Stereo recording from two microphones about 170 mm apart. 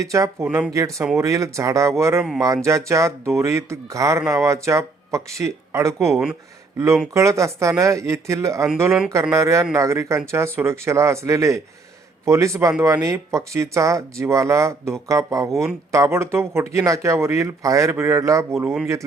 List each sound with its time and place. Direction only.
0.0 s speech: 20° right (ahead or behind)
0.4 s speech: 5° right (ahead or behind)
0.7 s speech: 15° right (ahead or behind)